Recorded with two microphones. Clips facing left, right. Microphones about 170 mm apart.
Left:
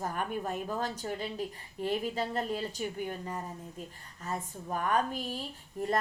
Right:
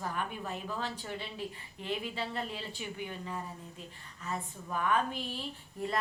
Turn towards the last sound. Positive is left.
turn(degrees=45)  # may be behind; listen again after turning